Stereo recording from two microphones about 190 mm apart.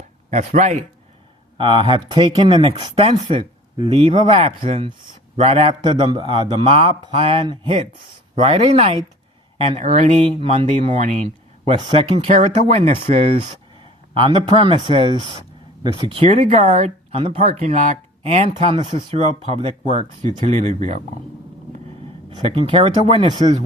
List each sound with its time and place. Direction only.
0.3 s speech: 40° right (ahead or behind)
1.5 s speech: 25° right (ahead or behind)
16.4 s speech: 40° right (ahead or behind)
22.4 s speech: 30° right (ahead or behind)